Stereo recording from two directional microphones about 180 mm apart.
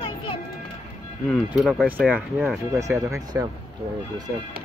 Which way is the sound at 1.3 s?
Centre (ahead or behind).